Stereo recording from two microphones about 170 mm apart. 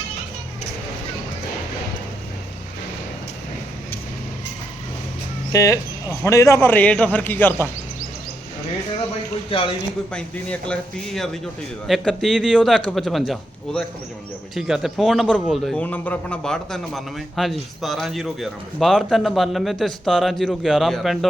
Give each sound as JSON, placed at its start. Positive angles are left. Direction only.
{"t": 5.5, "sound": "a man's voice", "side_deg": 20}
{"t": 9.5, "sound": "a man's voice", "side_deg": 30}
{"t": 10.1, "sound": "a man's voice", "side_deg": 5}